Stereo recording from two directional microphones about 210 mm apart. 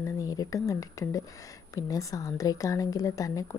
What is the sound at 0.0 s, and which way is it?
Speech, 15° left (ahead or behind).